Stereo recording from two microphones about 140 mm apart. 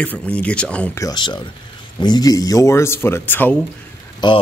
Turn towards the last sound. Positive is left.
turn(degrees=30)  # may be behind; listen again after turning